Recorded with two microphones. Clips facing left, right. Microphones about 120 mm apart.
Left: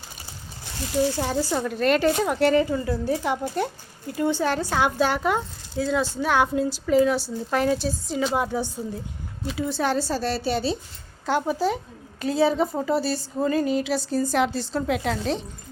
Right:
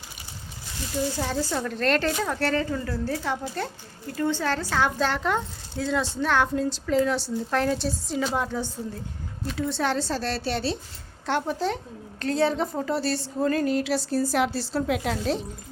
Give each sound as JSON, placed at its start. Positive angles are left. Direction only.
{"t": 1.2, "sound": "a woman's voice", "side_deg": 10}